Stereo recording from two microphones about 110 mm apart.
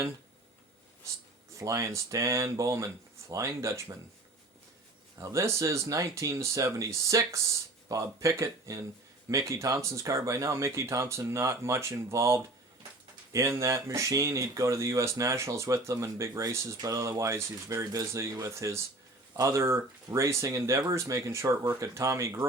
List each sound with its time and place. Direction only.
1.5 s speech: 30° right (ahead or behind)
5.1 s speech: 30° right (ahead or behind)